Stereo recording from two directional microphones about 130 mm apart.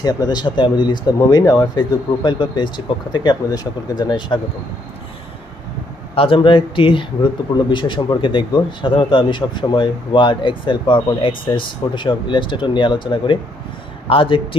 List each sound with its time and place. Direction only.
0.0 s speech: 30° left (ahead or behind)
6.1 s speech: 45° left (ahead or behind)